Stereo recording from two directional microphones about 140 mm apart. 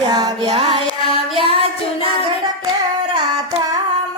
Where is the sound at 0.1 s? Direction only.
30° right (ahead or behind).